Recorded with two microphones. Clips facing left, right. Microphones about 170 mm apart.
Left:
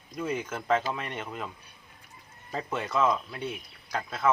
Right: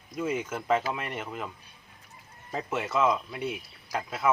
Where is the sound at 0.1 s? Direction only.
5° right (ahead or behind).